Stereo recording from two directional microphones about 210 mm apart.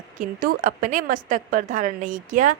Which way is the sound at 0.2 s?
40° right (ahead or behind).